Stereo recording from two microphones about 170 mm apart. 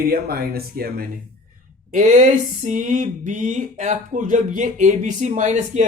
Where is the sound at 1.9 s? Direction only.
45° right (ahead or behind).